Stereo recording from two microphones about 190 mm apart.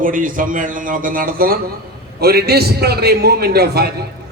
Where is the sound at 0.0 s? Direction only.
45° right (ahead or behind).